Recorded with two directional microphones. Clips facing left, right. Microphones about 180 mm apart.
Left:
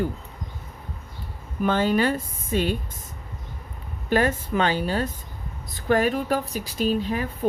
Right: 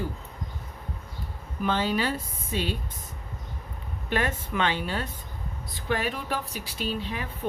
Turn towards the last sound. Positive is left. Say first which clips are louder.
# left 8 dB
turn(degrees=45)  # may be behind; listen again after turning